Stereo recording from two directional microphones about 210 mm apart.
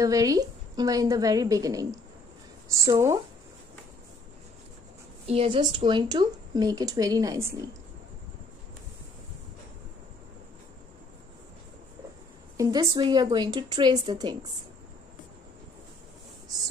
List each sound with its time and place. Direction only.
0.0 s a woman's voice: 15° right (ahead or behind)
5.2 s a woman's voice: 30° right (ahead or behind)
12.5 s a woman's voice: 20° right (ahead or behind)